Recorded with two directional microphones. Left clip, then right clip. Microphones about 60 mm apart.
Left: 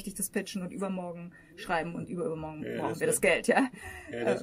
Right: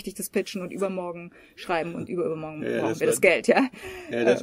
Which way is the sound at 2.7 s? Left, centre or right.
Right.